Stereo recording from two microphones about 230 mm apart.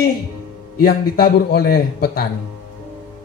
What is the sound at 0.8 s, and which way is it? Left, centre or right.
Speech, left.